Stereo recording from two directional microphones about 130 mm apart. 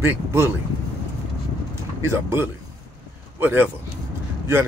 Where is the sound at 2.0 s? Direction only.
20° right (ahead or behind).